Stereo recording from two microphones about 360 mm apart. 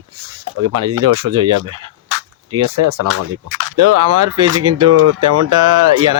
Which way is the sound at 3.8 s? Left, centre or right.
Right.